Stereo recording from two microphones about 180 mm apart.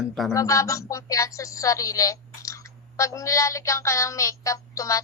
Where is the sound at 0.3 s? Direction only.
15° left (ahead or behind).